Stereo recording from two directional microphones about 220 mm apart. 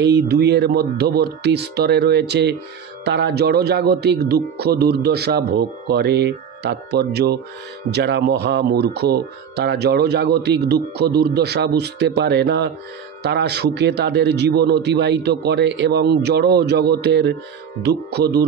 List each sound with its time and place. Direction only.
0.0 s speech: 50° right (ahead or behind)